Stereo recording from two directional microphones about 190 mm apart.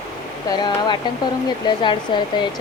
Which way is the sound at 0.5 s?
25° left (ahead or behind).